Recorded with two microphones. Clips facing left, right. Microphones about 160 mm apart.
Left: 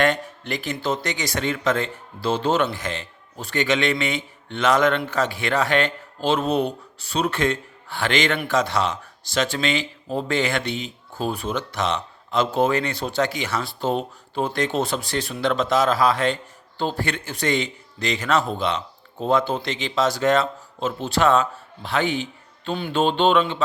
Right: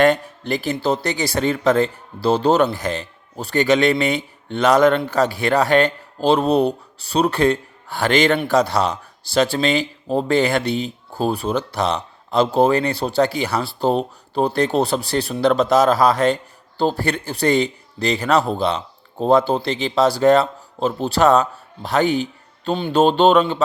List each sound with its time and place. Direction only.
0.0 s speech: 35° right (ahead or behind)